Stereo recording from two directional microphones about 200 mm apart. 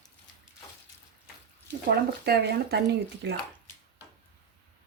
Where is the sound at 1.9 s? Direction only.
55° right (ahead or behind).